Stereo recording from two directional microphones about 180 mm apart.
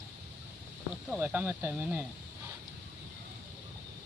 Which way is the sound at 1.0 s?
5° right (ahead or behind).